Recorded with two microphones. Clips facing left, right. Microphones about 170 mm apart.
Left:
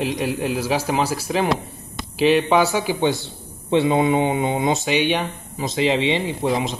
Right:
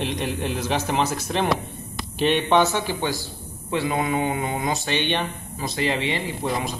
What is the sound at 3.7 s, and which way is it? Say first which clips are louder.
Speech: left 6 dB; 25° left (ahead or behind).